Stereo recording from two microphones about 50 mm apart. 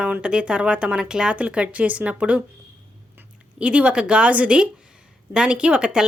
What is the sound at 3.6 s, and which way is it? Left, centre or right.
Speech, right.